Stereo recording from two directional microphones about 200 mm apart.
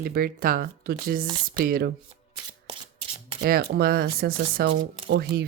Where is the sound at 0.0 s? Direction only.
50° right (ahead or behind).